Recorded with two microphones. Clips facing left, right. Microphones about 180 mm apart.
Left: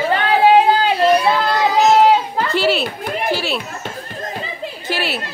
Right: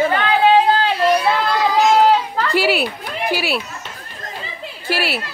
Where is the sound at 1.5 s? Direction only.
20° left (ahead or behind).